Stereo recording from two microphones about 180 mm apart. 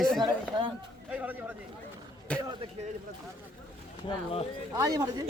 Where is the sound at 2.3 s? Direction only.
5° left (ahead or behind).